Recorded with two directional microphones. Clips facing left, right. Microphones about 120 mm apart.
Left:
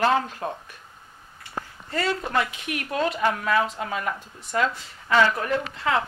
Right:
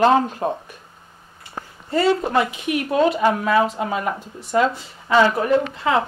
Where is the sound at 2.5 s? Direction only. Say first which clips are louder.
Right 8 dB; 15° right (ahead or behind).